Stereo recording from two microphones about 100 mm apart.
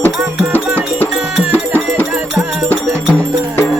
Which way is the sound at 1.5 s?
20° left (ahead or behind).